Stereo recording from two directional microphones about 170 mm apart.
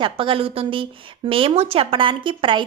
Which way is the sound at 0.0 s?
30° right (ahead or behind).